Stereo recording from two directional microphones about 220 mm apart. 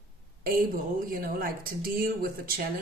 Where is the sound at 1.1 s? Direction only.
40° right (ahead or behind).